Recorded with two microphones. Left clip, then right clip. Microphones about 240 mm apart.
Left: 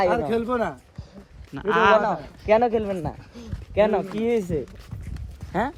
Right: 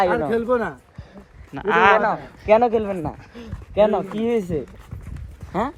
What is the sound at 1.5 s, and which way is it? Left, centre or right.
Speech, centre.